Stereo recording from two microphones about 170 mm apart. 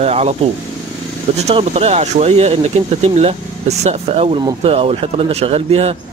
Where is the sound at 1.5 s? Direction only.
40° right (ahead or behind).